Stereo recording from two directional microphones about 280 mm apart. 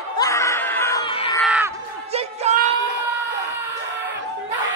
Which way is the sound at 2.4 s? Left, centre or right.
Right.